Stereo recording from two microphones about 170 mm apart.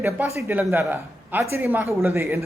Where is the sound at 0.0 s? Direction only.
15° right (ahead or behind).